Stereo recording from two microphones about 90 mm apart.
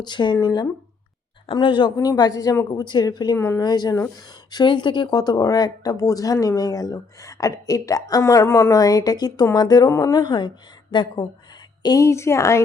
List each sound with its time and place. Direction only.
0.0 s speech: 55° left (ahead or behind)
2.0 s speech: 45° left (ahead or behind)
3.3 s speech: 25° left (ahead or behind)
3.6 s speech: 50° left (ahead or behind)
11.8 s a woman's voice: 50° left (ahead or behind)
12.0 s a woman's voice: 30° left (ahead or behind)